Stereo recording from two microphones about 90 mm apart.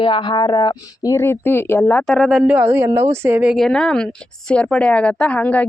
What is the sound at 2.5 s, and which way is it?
Speech, 25° right (ahead or behind).